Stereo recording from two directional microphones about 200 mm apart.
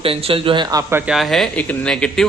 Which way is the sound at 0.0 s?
30° right (ahead or behind).